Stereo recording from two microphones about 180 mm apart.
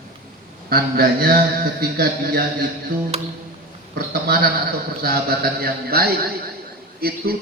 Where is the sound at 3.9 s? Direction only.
60° right (ahead or behind).